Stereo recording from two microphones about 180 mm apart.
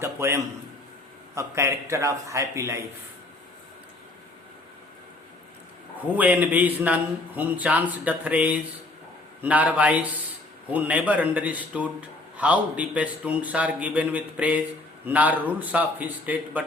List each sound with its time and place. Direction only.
0.0 s a sound: 15° right (ahead or behind)
1.4 s a man's voice: 15° right (ahead or behind)
6.1 s a man's voice: 10° right (ahead or behind)